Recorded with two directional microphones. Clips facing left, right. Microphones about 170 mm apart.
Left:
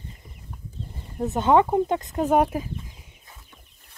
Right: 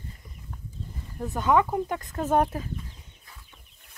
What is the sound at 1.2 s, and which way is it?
Speech, 25° left (ahead or behind).